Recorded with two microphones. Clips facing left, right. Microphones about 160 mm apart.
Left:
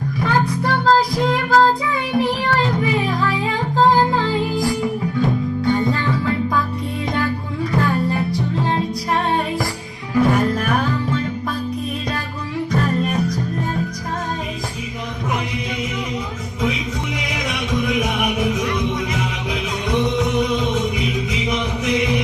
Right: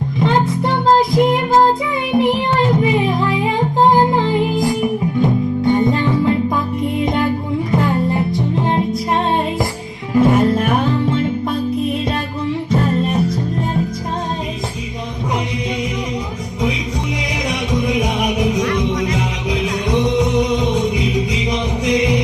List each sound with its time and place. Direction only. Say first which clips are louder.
0.2 s child singing: right 4 dB; 20° right (ahead or behind)
2.1 s music: right 4 dB; 20° right (ahead or behind)
10.2 s music: right 4 dB; 25° right (ahead or behind)
12.7 s music: right 3 dB; 25° right (ahead or behind)
17.5 s music: right 2 dB; 20° right (ahead or behind)